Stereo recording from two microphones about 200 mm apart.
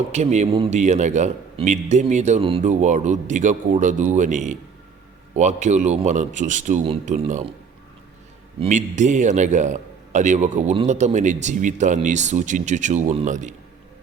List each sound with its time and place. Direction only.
0.1 s a man's voice: 35° right (ahead or behind)
8.5 s a man's voice: 35° right (ahead or behind)